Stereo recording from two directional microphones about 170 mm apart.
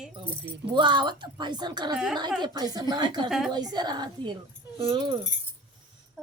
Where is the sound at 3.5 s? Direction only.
25° right (ahead or behind).